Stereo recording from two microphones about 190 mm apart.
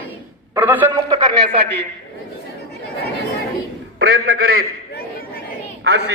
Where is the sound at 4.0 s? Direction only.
50° right (ahead or behind).